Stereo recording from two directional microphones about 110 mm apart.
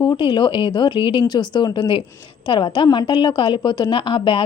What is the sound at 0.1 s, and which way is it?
A woman's voice, 45° left (ahead or behind).